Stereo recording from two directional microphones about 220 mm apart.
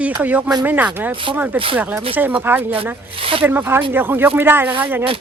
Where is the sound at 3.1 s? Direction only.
25° right (ahead or behind).